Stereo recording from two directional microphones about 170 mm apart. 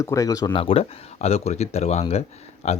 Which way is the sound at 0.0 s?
20° left (ahead or behind).